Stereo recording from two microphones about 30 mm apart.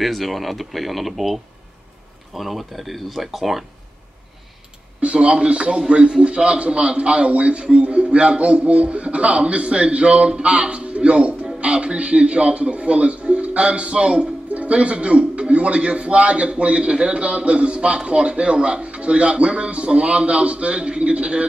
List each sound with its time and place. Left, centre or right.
0.0 s speech: centre
5.0 s a man's voice: right